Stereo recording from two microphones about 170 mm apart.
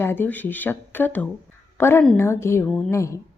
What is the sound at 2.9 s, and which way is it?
Speech, 15° left (ahead or behind).